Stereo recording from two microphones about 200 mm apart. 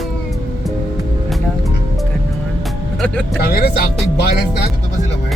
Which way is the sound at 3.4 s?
50° left (ahead or behind).